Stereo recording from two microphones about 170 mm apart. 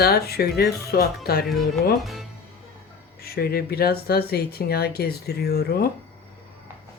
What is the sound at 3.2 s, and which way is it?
Speech, 65° left (ahead or behind).